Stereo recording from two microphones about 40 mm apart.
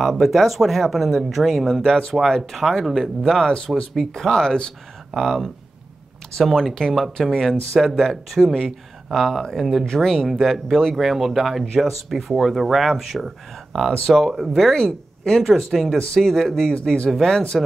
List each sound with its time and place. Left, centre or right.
0.0 s speech: centre
1.8 s speech: centre
2.2 s speech: centre
3.3 s speech: centre
3.9 s speech: centre
6.9 s speech: centre
7.2 s speech: centre
15.4 s speech: centre